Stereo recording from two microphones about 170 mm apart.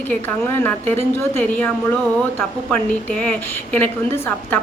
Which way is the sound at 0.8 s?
40° right (ahead or behind).